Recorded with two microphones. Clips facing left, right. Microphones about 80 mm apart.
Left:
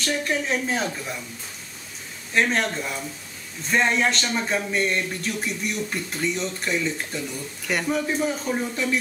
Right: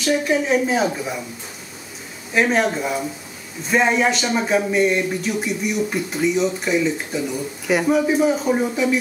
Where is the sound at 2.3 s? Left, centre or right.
Centre.